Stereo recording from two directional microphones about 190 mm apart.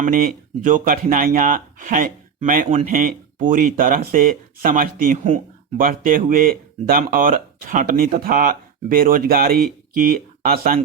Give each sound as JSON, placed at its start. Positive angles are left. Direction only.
{"t": 0.0, "sound": "speech", "side_deg": -45}